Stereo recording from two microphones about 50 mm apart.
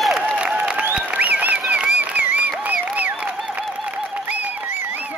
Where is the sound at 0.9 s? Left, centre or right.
Right.